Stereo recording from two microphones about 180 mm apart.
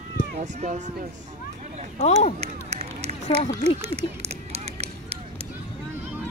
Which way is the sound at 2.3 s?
40° right (ahead or behind).